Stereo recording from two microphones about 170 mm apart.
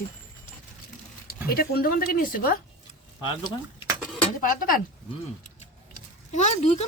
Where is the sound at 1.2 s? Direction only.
60° left (ahead or behind).